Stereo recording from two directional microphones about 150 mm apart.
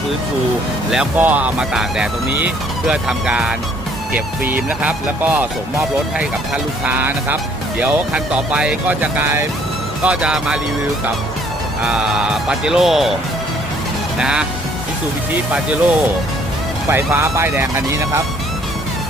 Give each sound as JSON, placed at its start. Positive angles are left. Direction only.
{"t": 0.9, "sound": "speech", "side_deg": -5}
{"t": 11.9, "sound": "speech", "side_deg": -5}
{"t": 14.2, "sound": "speech", "side_deg": -5}
{"t": 15.5, "sound": "speech", "side_deg": -10}